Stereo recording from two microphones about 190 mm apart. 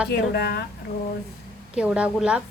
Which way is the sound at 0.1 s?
60° left (ahead or behind).